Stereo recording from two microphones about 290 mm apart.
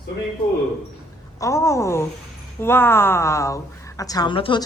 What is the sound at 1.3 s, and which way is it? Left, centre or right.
A woman's voice, centre.